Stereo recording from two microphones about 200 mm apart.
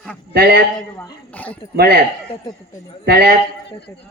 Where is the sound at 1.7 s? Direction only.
50° right (ahead or behind).